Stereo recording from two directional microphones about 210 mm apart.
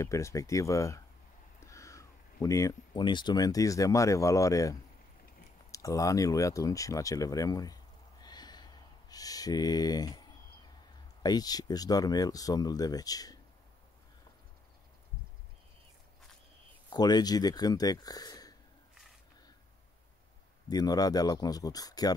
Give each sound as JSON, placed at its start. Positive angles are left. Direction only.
{"t": 0.0, "sound": "speech", "side_deg": 15}
{"t": 11.2, "sound": "speech", "side_deg": 20}
{"t": 16.9, "sound": "speech", "side_deg": 20}
{"t": 20.6, "sound": "speech", "side_deg": 20}